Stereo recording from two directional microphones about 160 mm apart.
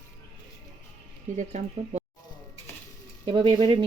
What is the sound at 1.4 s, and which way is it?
Speech, 45° right (ahead or behind).